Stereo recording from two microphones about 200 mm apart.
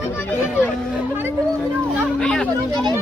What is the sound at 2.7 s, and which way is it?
Speech, 20° right (ahead or behind).